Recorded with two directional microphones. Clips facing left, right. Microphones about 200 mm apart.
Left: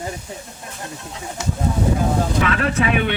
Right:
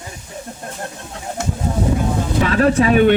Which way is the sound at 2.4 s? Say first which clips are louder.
Right 5 dB; 35° right (ahead or behind).